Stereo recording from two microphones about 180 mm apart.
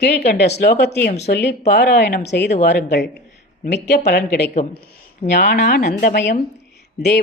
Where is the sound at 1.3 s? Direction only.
70° left (ahead or behind).